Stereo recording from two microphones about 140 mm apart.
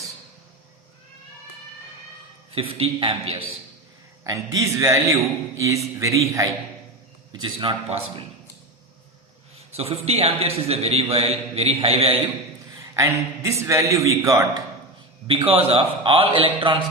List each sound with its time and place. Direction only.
2.6 s a man's voice: 40° right (ahead or behind)
4.2 s a man's voice: 25° right (ahead or behind)
7.4 s a man's voice: 35° right (ahead or behind)
9.7 s a man's voice: 45° right (ahead or behind)
12.9 s a man's voice: 20° right (ahead or behind)
15.3 s a man's voice: 40° right (ahead or behind)